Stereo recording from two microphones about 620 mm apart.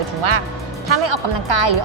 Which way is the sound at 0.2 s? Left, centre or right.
Right.